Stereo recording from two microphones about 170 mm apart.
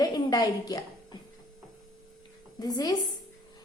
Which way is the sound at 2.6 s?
25° left (ahead or behind).